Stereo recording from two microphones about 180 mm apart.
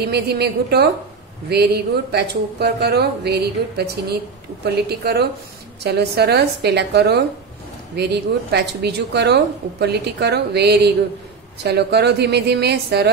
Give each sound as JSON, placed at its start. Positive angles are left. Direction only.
{"t": 0.0, "sound": "a woman's voice", "side_deg": -65}